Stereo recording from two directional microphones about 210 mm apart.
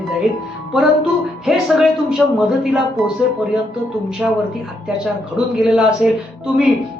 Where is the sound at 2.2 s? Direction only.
Centre (ahead or behind).